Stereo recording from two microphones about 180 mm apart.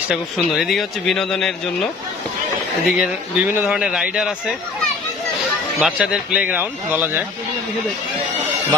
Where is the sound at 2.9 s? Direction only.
5° right (ahead or behind).